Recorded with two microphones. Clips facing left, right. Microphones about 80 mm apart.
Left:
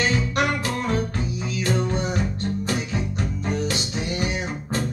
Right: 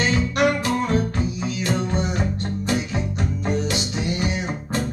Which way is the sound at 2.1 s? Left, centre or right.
Right.